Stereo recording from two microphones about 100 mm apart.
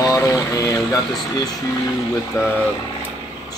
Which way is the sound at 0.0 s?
35° left (ahead or behind).